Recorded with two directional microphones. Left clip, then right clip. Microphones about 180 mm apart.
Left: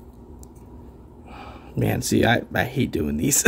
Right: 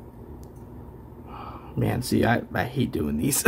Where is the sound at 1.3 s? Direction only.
30° left (ahead or behind).